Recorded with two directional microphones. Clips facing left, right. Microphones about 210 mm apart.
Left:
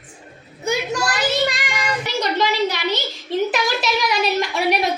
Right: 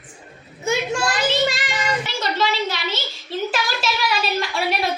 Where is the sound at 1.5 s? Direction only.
15° left (ahead or behind).